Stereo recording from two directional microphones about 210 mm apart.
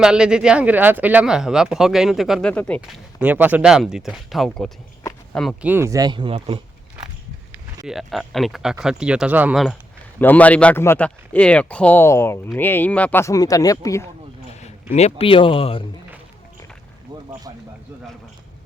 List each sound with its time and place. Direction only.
0.0 s speech: 5° right (ahead or behind)
3.2 s speech: 10° right (ahead or behind)
5.7 s speech: 15° right (ahead or behind)
7.9 s speech: centre (ahead or behind)
10.2 s speech: 10° left (ahead or behind)
14.6 s speech: 30° left (ahead or behind)